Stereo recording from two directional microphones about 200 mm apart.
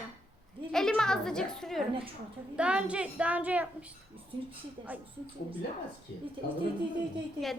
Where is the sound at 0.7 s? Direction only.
5° left (ahead or behind).